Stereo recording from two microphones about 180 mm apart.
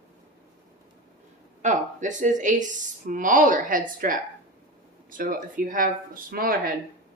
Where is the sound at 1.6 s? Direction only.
45° right (ahead or behind).